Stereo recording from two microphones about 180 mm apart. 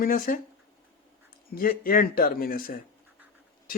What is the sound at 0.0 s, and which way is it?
Speech, 50° left (ahead or behind).